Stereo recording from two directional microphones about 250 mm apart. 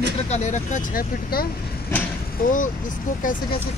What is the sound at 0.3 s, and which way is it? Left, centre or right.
Speech, left.